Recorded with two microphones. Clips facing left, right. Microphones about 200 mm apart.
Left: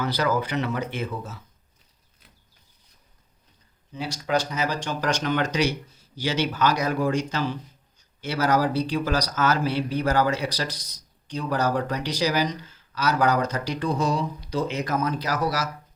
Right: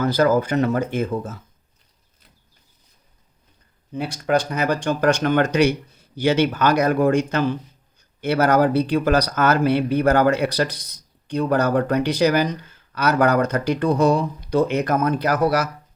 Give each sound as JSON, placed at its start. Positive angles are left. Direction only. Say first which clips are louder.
{"t": 0.0, "sound": "speech", "louder": "right 7 dB", "side_deg": -45}
{"t": 3.9, "sound": "speech", "louder": "right 5 dB", "side_deg": -55}